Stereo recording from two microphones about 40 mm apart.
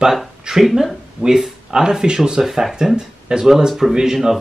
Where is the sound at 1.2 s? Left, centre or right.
Right.